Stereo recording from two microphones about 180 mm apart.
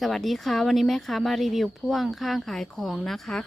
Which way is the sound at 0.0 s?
Centre (ahead or behind).